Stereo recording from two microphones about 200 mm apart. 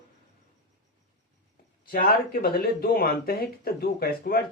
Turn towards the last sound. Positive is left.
turn(degrees=50)  # may be behind; listen again after turning